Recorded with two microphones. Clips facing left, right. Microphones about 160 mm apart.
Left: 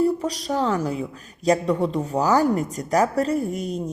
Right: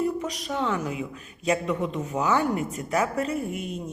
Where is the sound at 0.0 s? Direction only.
35° left (ahead or behind).